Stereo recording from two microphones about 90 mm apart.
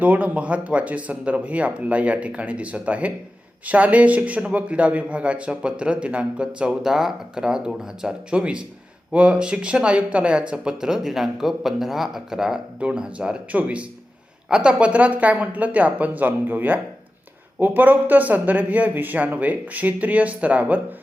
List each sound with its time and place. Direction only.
0.0 s speech: 15° right (ahead or behind)